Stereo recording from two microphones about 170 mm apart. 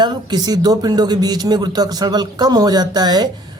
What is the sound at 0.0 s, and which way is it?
A man's voice, 25° right (ahead or behind).